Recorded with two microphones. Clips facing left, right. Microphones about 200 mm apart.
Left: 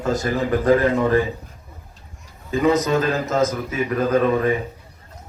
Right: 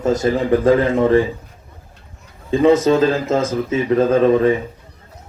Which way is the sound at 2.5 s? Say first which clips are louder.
Right 5 dB; 30° right (ahead or behind).